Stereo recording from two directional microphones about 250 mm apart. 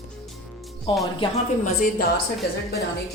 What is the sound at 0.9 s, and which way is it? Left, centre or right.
Speech, centre.